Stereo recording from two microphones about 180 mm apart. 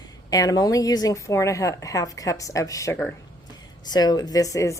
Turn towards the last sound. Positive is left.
turn(degrees=15)  # may be behind; listen again after turning